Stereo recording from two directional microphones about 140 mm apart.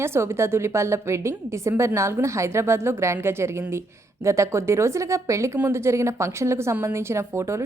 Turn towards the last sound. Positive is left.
turn(degrees=-20)  # may be behind; listen again after turning